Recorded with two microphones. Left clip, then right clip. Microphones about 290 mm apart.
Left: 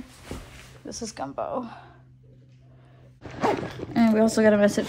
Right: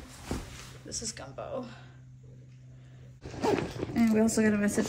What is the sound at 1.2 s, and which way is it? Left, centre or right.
Speech, centre.